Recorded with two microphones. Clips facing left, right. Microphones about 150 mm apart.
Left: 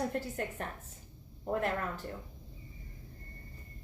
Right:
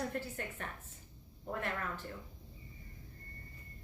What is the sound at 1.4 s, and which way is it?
Speech, 40° left (ahead or behind).